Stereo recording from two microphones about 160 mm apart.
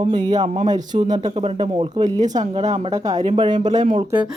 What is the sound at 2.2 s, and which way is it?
Speech, 45° right (ahead or behind).